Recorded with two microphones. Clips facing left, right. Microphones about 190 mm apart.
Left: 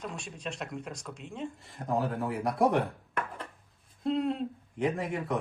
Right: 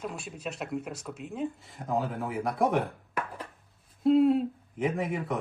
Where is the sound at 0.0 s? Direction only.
5° right (ahead or behind).